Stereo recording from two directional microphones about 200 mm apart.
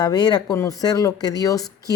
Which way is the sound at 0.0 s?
20° left (ahead or behind).